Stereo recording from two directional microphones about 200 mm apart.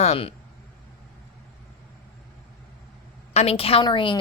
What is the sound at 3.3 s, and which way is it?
Speech, 30° left (ahead or behind).